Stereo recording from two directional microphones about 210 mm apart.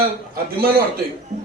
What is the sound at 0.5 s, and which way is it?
Speech, 45° right (ahead or behind).